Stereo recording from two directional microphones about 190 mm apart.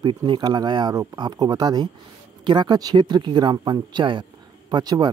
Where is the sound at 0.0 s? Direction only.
25° right (ahead or behind).